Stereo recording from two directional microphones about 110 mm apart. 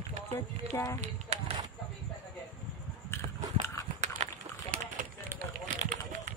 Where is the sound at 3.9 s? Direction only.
90° right.